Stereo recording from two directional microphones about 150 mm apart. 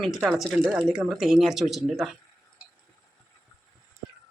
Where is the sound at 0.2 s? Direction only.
5° right (ahead or behind).